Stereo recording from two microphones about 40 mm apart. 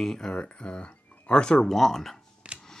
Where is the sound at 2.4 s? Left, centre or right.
Right.